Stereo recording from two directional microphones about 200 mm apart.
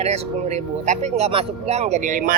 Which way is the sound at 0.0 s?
35° right (ahead or behind).